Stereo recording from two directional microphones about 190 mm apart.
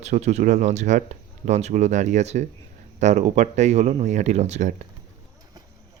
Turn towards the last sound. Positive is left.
turn(degrees=-35)  # may be behind; listen again after turning